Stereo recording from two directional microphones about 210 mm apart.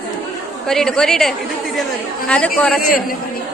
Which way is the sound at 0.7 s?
5° left (ahead or behind).